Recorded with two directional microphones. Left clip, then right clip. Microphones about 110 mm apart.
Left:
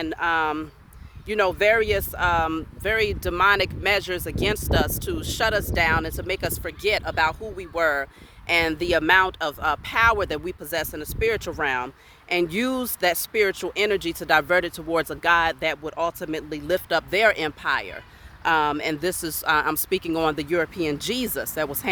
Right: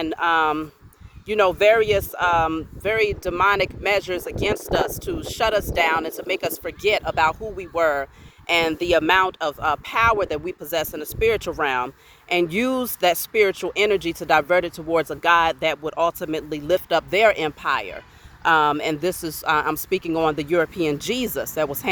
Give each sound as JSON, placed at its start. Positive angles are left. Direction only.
{"t": 0.0, "sound": "speech", "side_deg": 0}
{"t": 1.4, "sound": "speech", "side_deg": 10}
{"t": 10.2, "sound": "speech", "side_deg": 40}
{"t": 10.7, "sound": "speech", "side_deg": 10}
{"t": 12.3, "sound": "speech", "side_deg": 15}
{"t": 15.8, "sound": "speech", "side_deg": -5}
{"t": 16.7, "sound": "speech", "side_deg": 15}
{"t": 18.4, "sound": "speech", "side_deg": 5}
{"t": 18.9, "sound": "speech", "side_deg": 25}
{"t": 20.5, "sound": "speech", "side_deg": 0}
{"t": 21.0, "sound": "speech", "side_deg": 15}